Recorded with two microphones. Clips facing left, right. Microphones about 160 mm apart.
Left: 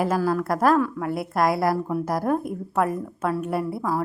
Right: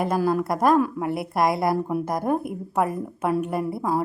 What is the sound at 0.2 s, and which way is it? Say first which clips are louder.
Speech: right 1 dB; 15° right (ahead or behind).